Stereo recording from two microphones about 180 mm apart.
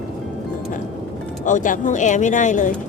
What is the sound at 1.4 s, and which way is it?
Speech, 45° left (ahead or behind).